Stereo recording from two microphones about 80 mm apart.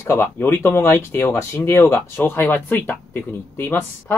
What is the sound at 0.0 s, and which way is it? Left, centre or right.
Speech, left.